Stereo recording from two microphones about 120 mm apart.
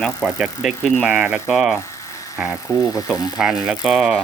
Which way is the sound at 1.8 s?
25° left (ahead or behind).